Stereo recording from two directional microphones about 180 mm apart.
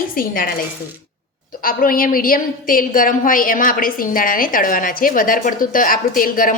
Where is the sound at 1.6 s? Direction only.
50° left (ahead or behind).